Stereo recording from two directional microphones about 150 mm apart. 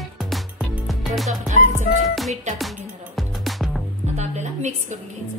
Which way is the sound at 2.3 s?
50° right (ahead or behind).